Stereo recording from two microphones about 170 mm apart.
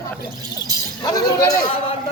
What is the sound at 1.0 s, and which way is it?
Speech, 20° left (ahead or behind).